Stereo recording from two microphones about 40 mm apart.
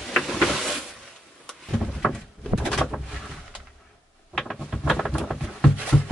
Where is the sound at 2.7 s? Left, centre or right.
Centre.